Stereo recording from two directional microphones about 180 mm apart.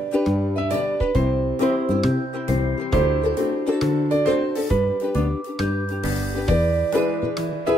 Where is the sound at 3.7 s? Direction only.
Centre (ahead or behind).